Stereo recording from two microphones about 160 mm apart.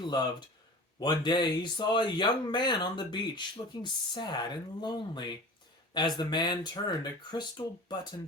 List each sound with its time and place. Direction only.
0.0 s speech: 25° left (ahead or behind)